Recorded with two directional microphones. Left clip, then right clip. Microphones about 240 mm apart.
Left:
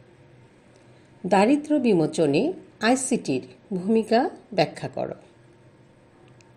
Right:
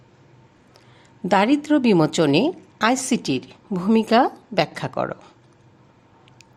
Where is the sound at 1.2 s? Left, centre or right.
Right.